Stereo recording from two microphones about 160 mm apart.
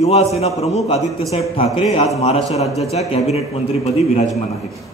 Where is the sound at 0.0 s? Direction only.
40° left (ahead or behind).